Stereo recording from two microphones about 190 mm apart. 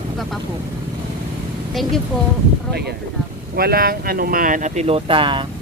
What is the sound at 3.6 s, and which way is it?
Speech, 55° right (ahead or behind).